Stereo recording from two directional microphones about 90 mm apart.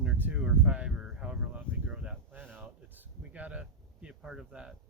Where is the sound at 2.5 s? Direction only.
20° right (ahead or behind).